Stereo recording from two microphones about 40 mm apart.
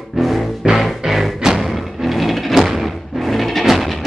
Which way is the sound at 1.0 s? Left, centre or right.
Centre.